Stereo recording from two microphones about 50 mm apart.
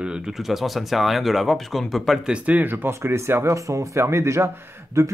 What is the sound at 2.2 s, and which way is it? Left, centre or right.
Speech, right.